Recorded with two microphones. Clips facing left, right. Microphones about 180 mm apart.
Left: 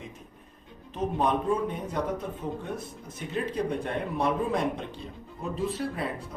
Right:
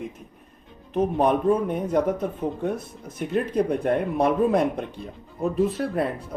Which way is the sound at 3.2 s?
55° right (ahead or behind).